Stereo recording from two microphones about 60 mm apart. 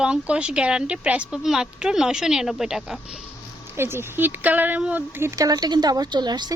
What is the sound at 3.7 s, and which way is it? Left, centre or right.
Speech, right.